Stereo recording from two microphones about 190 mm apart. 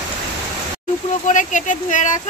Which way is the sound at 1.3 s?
40° left (ahead or behind).